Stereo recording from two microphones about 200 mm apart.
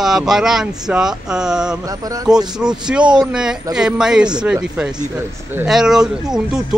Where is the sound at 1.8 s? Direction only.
15° right (ahead or behind).